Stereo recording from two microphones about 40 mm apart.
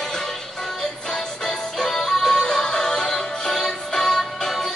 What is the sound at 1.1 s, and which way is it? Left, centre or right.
Music, centre.